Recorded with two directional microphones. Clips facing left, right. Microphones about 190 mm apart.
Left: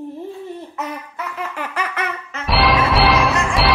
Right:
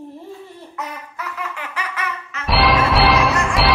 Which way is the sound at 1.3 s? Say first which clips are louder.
Left 5 dB; 55° left (ahead or behind).